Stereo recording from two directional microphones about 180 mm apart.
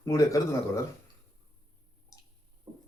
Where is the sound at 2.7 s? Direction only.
25° right (ahead or behind).